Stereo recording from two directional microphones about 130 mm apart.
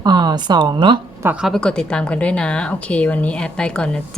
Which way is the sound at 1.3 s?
Centre (ahead or behind).